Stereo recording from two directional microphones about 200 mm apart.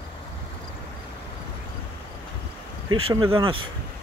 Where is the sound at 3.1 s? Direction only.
15° right (ahead or behind).